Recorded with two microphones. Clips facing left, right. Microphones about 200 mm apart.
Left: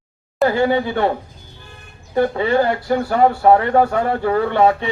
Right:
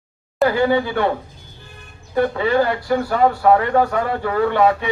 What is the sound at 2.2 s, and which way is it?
Speech, 25° left (ahead or behind).